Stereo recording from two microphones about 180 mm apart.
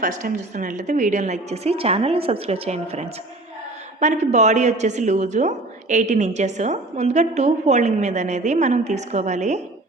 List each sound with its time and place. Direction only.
0.0 s a woman's voice: 45° right (ahead or behind)